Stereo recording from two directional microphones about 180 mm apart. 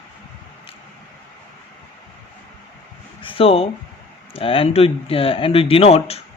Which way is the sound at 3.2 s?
30° left (ahead or behind).